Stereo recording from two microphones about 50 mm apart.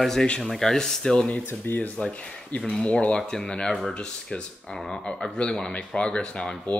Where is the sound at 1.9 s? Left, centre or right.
Left.